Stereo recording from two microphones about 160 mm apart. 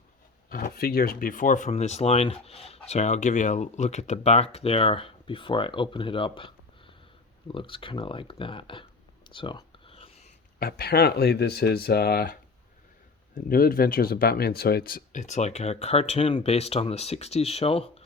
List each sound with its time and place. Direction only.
0.5 s speech: 65° left (ahead or behind); by 8.9 s 35° left (ahead or behind)
9.3 s a sound: 30° left (ahead or behind)
10.6 s speech: 75° left (ahead or behind); by 18.0 s 40° left (ahead or behind)